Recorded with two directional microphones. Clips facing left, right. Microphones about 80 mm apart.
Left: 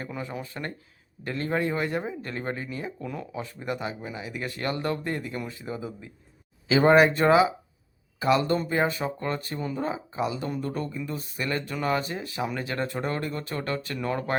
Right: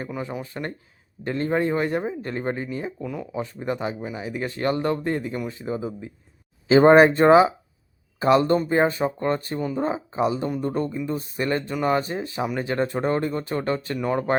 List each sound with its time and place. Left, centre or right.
0.2 s speech: right
3.0 s speech: centre
3.3 s speech: right